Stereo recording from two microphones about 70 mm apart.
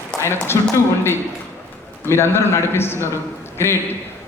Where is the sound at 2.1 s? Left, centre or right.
Left.